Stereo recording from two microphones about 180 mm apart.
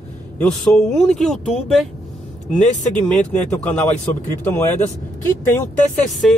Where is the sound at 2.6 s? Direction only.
40° left (ahead or behind).